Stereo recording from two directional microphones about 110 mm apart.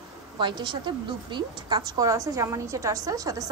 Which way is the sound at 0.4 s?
45° right (ahead or behind).